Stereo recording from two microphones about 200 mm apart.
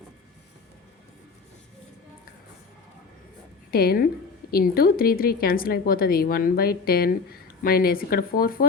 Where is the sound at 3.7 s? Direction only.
50° left (ahead or behind).